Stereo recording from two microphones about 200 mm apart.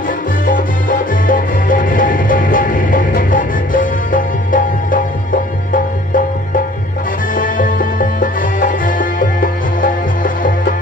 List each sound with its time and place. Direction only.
0.5 s music: 45° left (ahead or behind)